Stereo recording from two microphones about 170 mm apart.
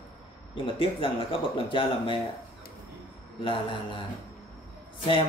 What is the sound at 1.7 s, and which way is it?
Speech, 30° left (ahead or behind).